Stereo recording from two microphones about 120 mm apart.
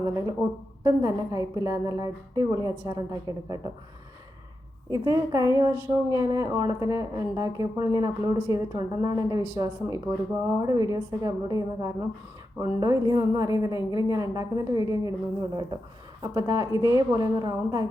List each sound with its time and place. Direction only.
0.0 s a woman's voice: 30° right (ahead or behind)
4.9 s a woman's voice: 30° right (ahead or behind)